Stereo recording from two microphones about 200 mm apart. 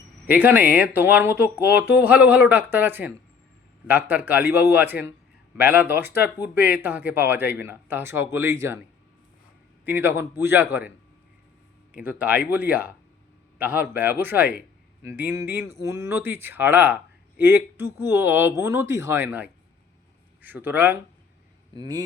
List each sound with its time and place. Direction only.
0.3 s speech: 10° right (ahead or behind)
9.8 s speech: 10° right (ahead or behind)
12.0 s speech: 5° right (ahead or behind)